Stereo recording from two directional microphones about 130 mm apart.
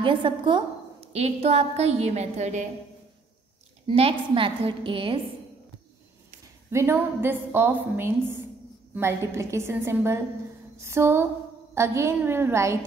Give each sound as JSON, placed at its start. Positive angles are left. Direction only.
{"t": 0.0, "sound": "a woman's voice", "side_deg": -40}
{"t": 1.1, "sound": "a woman's voice", "side_deg": -55}
{"t": 3.8, "sound": "a woman's voice", "side_deg": -45}
{"t": 6.7, "sound": "a woman's voice", "side_deg": -20}